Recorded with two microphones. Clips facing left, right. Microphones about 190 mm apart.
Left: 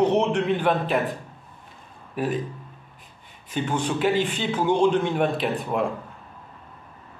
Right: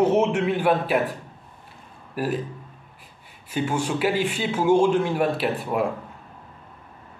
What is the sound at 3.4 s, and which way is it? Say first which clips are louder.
Speech: right 1 dB; 5° right (ahead or behind).